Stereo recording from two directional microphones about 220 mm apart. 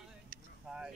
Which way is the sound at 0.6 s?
5° right (ahead or behind).